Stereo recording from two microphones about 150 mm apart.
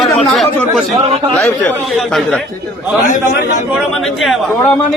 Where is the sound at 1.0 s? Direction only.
40° right (ahead or behind).